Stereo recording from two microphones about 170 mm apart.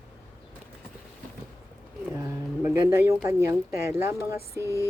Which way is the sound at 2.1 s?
15° right (ahead or behind).